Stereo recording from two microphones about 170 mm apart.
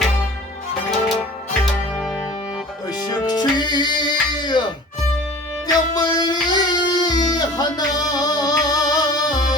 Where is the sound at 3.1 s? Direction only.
25° left (ahead or behind).